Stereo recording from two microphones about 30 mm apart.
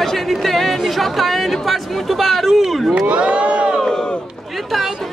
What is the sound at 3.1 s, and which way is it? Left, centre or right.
Crowd, right.